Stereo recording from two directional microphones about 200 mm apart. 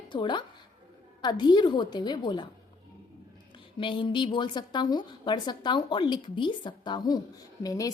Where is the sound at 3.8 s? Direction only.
25° left (ahead or behind).